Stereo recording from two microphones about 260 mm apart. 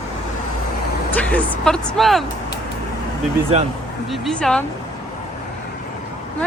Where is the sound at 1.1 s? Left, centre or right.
Centre.